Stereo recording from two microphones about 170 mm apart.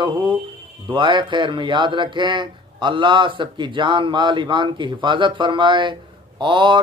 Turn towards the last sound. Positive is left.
turn(degrees=-30)  # may be behind; listen again after turning